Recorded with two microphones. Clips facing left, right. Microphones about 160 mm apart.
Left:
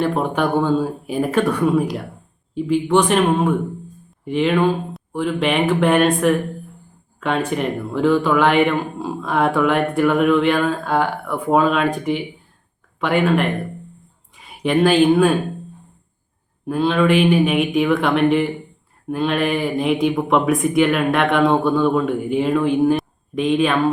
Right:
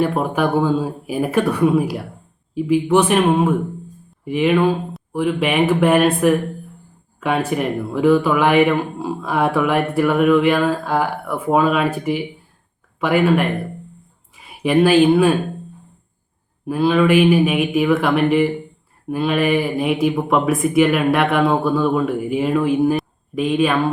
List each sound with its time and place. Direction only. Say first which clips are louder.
0.0 s speech: right 1 dB; 5° right (ahead or behind)
16.6 s speech: right 1 dB; 5° right (ahead or behind)